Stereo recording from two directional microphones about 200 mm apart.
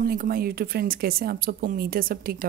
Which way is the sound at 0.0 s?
45° right (ahead or behind).